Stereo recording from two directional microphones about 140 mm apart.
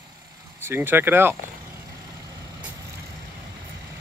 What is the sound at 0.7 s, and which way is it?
Speech, 15° right (ahead or behind).